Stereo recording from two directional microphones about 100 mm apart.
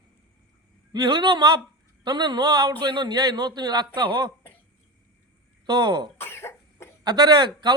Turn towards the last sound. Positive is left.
turn(degrees=-45)  # may be behind; listen again after turning